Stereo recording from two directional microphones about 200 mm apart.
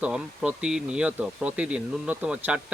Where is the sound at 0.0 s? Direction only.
5° right (ahead or behind).